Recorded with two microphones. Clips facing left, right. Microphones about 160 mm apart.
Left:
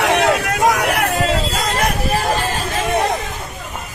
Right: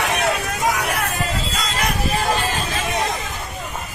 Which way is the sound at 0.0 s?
85° left.